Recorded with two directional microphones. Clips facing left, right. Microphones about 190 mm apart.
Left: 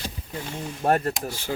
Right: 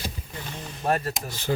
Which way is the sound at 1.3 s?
10° left (ahead or behind).